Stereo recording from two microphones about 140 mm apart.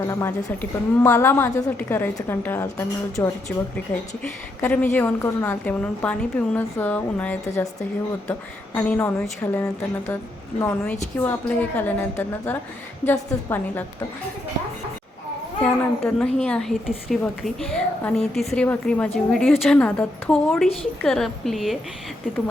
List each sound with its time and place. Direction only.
0.1 s a woman's voice: 20° left (ahead or behind)
4.2 s a woman's voice: 10° left (ahead or behind)
15.6 s a woman's voice: 5° left (ahead or behind)